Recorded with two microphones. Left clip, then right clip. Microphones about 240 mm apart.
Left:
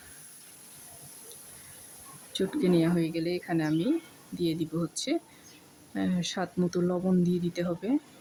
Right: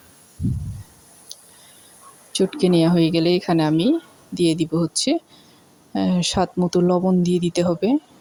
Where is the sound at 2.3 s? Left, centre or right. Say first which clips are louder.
Right 8 dB; right.